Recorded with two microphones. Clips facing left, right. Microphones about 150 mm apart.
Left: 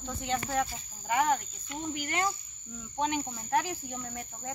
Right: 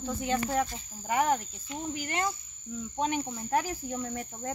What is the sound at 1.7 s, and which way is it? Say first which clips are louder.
Cricket: even; 30° right (ahead or behind).